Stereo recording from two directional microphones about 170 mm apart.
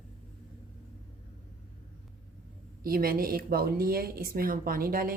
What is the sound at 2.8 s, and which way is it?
A woman's voice, 60° right (ahead or behind).